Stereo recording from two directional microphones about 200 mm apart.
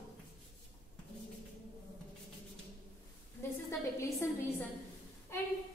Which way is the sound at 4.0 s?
15° left (ahead or behind).